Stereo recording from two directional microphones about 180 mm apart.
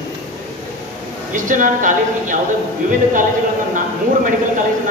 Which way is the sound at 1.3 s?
45° right (ahead or behind).